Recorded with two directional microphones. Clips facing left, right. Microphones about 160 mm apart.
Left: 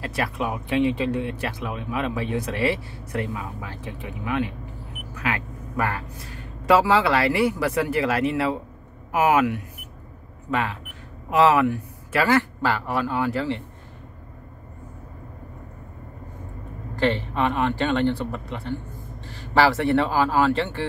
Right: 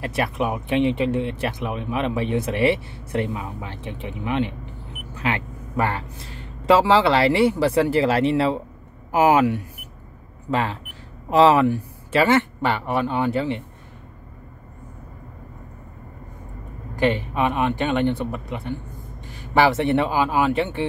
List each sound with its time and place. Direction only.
0.0 s speech: 25° right (ahead or behind)
16.9 s speech: 15° right (ahead or behind)